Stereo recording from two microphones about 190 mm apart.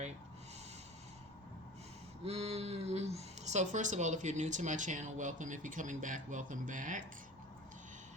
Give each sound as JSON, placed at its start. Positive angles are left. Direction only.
{"t": 2.2, "sound": "speech", "side_deg": -35}